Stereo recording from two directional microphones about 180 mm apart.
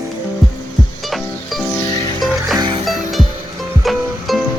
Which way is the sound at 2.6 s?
25° right (ahead or behind).